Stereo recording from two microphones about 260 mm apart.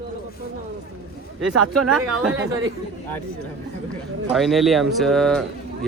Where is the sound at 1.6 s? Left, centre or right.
Right.